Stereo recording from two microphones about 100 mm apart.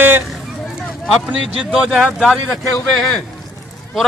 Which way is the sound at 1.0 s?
5° right (ahead or behind).